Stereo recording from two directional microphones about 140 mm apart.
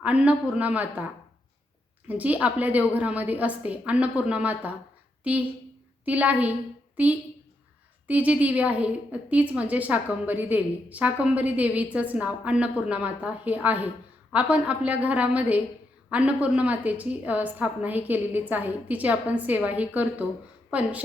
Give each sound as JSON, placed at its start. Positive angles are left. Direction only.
{"t": 0.0, "sound": "a woman's voice", "side_deg": -10}
{"t": 2.0, "sound": "a woman's voice", "side_deg": -10}